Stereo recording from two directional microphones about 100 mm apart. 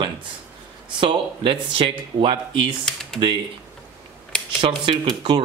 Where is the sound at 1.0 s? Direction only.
65° right (ahead or behind).